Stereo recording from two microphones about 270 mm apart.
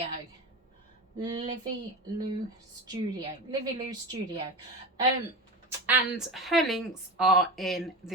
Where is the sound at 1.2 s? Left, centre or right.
Centre.